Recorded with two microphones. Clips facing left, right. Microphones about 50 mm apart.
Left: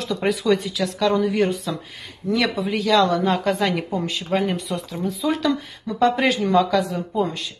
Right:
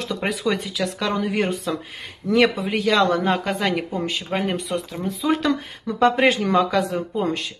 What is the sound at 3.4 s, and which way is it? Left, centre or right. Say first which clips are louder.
A woman's voice: left 2 dB; centre.